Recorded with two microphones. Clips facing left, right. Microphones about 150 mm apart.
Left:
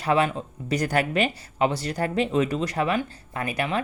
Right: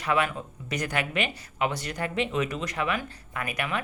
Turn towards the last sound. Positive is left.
turn(degrees=30)  # may be behind; listen again after turning